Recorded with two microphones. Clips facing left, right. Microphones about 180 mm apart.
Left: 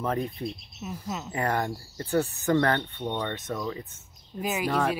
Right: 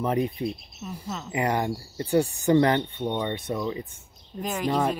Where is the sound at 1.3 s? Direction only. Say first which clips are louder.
Right 3 dB; 15° right (ahead or behind).